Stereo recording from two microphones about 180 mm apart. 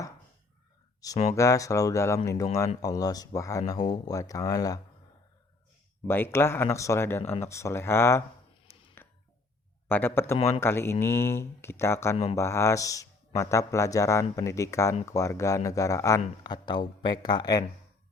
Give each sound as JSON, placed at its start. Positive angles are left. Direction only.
{"t": 1.4, "sound": "a man's voice", "side_deg": 20}
{"t": 6.1, "sound": "speech", "side_deg": 10}
{"t": 8.7, "sound": "a sound", "side_deg": 15}
{"t": 9.9, "sound": "speech", "side_deg": 10}
{"t": 12.1, "sound": "speech", "side_deg": 35}
{"t": 12.4, "sound": "a man's voice", "side_deg": 15}